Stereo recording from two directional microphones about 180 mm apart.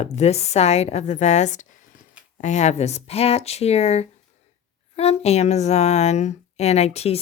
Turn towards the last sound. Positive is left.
turn(degrees=35)  # may be behind; listen again after turning